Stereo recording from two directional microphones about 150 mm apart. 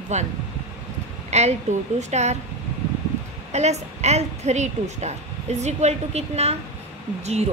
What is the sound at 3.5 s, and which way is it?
A woman's voice, 45° right (ahead or behind).